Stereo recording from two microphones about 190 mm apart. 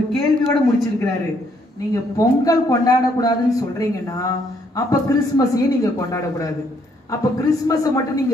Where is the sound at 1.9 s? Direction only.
20° left (ahead or behind).